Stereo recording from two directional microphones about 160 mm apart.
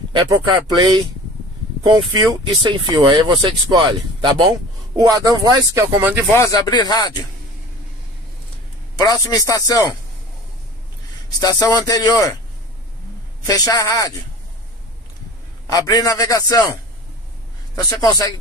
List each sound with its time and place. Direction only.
0.1 s speech: 30° right (ahead or behind)
6.3 s speech: 20° left (ahead or behind)
8.9 s speech: 25° left (ahead or behind)
11.3 s speech: 25° left (ahead or behind)
13.5 s speech: 25° left (ahead or behind)
15.6 s speech: 20° left (ahead or behind)
17.8 s speech: 25° left (ahead or behind)